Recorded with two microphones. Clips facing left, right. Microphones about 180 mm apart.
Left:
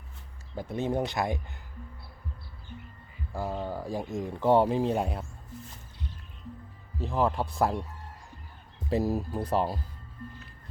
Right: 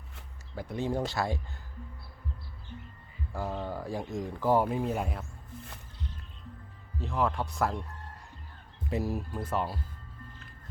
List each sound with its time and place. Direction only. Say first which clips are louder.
0.5 s speech: left 2 dB; 20° left (ahead or behind)
3.3 s speech: left 2 dB; 10° left (ahead or behind); by 5.2 s 30° left (ahead or behind)
7.1 s speech: left 3 dB; 35° left (ahead or behind)
8.9 s speech: left 5 dB; 35° left (ahead or behind)